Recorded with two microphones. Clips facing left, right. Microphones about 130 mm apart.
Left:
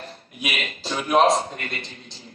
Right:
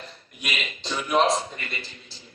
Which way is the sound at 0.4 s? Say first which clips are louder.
Left 3 dB; 45° left (ahead or behind).